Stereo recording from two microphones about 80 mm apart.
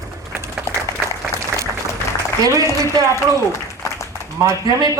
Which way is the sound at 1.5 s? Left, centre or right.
Right.